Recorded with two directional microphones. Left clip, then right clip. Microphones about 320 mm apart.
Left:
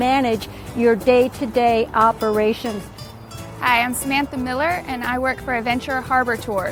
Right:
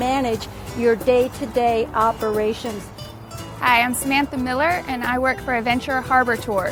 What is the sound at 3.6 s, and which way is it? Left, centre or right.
A woman's voice, centre.